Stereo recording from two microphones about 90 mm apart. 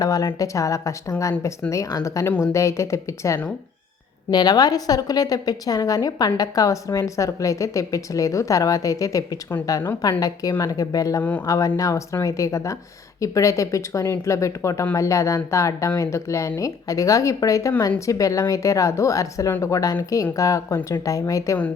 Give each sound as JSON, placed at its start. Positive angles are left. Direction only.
{"t": 0.0, "sound": "a woman's voice", "side_deg": 40}
{"t": 4.3, "sound": "a woman's voice", "side_deg": 50}
{"t": 11.2, "sound": "speech", "side_deg": 20}
{"t": 11.4, "sound": "a woman's voice", "side_deg": 40}